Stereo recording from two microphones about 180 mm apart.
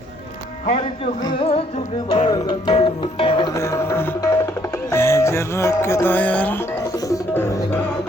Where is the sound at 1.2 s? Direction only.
25° left (ahead or behind).